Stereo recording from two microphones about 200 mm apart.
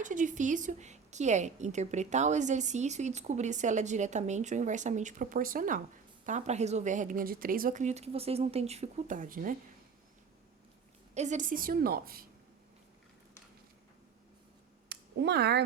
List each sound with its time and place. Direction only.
0.0 s a woman's voice: 40° right (ahead or behind)
11.1 s a woman's voice: 35° right (ahead or behind)
14.8 s a sound: 60° right (ahead or behind)